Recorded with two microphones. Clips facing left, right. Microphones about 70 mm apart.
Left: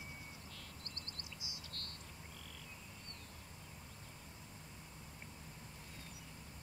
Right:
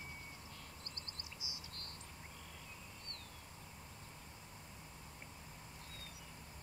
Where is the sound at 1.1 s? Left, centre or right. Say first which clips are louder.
Even; right.